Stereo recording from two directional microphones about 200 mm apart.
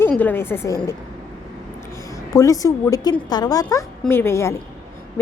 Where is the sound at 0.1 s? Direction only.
10° left (ahead or behind).